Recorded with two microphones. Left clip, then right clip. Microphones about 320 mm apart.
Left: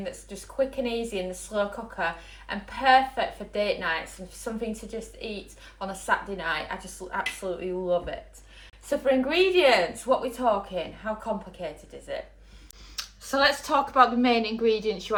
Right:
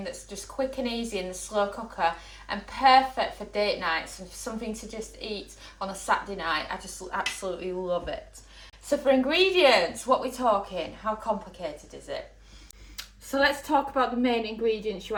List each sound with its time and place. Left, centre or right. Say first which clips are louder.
0.0 s a woman's voice: even; centre
13.9 s a woman's voice: left 5 dB; centre